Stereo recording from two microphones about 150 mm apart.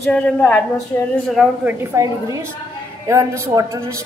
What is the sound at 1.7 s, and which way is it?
Speech, 20° right (ahead or behind).